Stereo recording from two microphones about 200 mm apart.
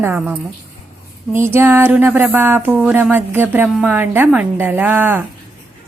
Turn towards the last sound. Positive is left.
turn(degrees=-10)  # may be behind; listen again after turning